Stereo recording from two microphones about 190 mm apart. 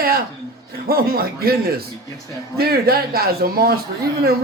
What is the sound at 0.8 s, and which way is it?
Speech, 50° right (ahead or behind).